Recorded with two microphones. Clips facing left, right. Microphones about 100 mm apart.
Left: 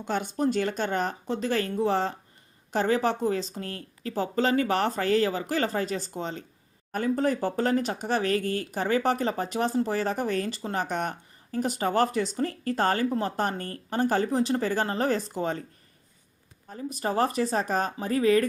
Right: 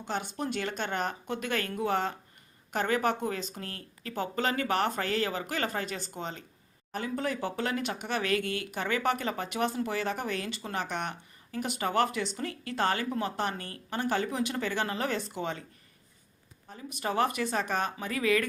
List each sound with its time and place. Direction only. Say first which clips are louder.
0.0 s speech: left 7 dB; 45° left (ahead or behind)
16.6 s speech: left 4 dB; 40° left (ahead or behind)